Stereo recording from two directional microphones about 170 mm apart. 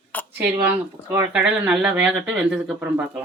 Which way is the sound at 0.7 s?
10° right (ahead or behind).